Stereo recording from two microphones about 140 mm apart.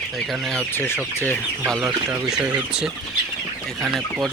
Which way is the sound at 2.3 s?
5° right (ahead or behind).